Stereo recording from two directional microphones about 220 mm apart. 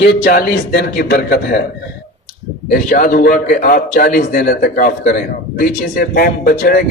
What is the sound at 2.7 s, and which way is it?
A man's voice, 40° left (ahead or behind).